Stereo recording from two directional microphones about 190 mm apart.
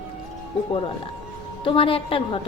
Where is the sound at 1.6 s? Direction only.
25° left (ahead or behind).